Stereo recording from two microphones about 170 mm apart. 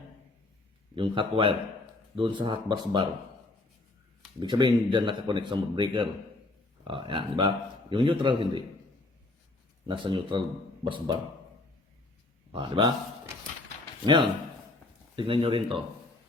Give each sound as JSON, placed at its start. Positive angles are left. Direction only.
{"t": 0.9, "sound": "a man's voice", "side_deg": -30}
{"t": 4.4, "sound": "a man's voice", "side_deg": -25}
{"t": 9.8, "sound": "a man's voice", "side_deg": -25}
{"t": 12.5, "sound": "a man's voice", "side_deg": -30}
{"t": 14.0, "sound": "a man's voice", "side_deg": -25}